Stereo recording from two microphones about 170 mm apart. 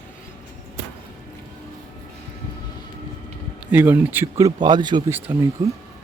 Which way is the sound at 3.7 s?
10° right (ahead or behind).